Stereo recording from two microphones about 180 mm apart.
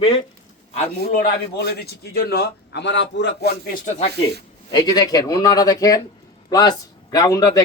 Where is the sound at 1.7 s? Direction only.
60° left (ahead or behind).